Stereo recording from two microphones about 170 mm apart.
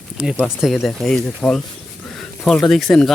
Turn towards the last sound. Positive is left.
turn(degrees=5)  # may be behind; listen again after turning